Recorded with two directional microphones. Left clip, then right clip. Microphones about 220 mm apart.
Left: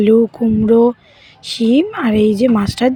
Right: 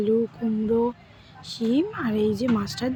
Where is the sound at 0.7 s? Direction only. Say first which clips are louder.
Left 13 dB; 35° left (ahead or behind).